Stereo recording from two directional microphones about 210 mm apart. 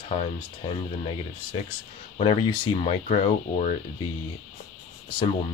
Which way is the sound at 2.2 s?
25° left (ahead or behind).